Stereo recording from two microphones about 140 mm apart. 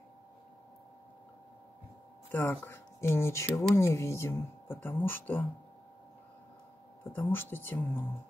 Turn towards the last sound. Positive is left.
turn(degrees=15)  # may be behind; listen again after turning